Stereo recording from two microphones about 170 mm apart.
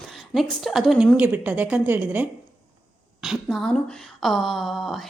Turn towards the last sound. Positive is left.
turn(degrees=0)  # may be behind; listen again after turning